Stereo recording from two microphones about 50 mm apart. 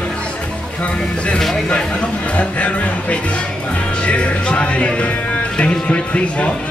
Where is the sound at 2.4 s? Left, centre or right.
Left.